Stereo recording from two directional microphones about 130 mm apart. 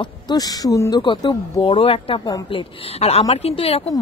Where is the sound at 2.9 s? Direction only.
50° left (ahead or behind).